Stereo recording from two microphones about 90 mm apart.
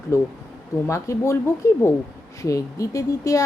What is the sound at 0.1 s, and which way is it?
A woman's voice, 30° left (ahead or behind).